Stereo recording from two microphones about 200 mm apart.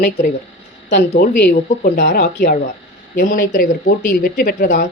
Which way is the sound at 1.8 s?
45° left (ahead or behind).